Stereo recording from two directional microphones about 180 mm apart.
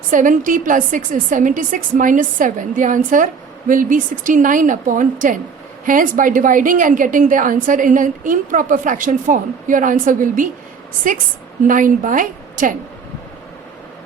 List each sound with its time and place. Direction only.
0.1 s a woman's voice: 45° right (ahead or behind)
11.7 s a woman's voice: 45° right (ahead or behind)